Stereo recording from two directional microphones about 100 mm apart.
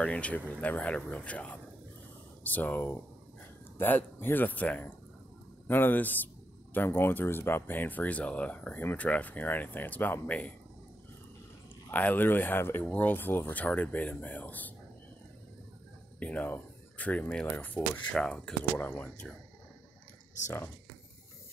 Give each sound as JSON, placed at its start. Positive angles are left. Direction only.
{"t": 0.0, "sound": "speech", "side_deg": 15}
{"t": 11.9, "sound": "speech", "side_deg": 15}
{"t": 16.2, "sound": "speech", "side_deg": 15}